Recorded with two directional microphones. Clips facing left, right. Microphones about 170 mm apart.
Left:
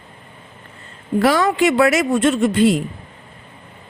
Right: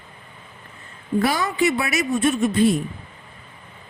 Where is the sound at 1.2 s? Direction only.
85° left.